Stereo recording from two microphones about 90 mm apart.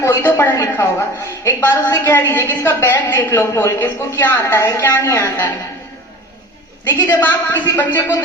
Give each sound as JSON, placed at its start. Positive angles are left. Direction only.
{"t": 0.0, "sound": "a woman's voice", "side_deg": 30}
{"t": 6.8, "sound": "a woman's voice", "side_deg": 25}